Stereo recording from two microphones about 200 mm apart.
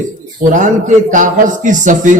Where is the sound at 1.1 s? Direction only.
40° right (ahead or behind).